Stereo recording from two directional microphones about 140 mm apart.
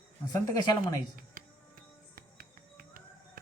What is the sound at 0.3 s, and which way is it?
Speech, 25° left (ahead or behind).